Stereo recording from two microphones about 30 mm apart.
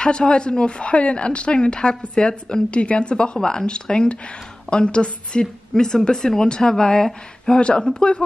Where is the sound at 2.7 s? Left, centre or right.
Left.